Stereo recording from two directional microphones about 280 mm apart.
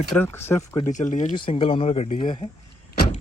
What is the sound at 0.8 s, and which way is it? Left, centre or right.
Speech, left.